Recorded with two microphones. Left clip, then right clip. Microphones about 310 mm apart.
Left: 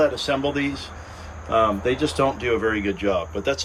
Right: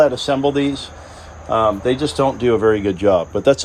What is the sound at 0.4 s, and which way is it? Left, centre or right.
Speech, right.